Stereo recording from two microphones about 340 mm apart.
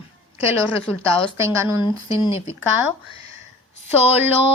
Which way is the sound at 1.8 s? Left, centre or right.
Centre.